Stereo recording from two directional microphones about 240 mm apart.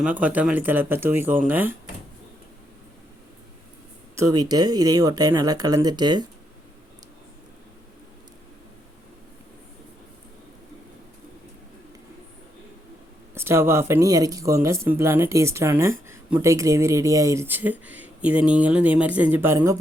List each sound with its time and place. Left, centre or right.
0.0 s speech: centre
4.1 s speech: centre
13.3 s speech: centre